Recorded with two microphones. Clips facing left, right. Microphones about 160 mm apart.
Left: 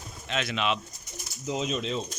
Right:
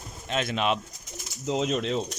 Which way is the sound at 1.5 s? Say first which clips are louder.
Right 4 dB; 65° right (ahead or behind).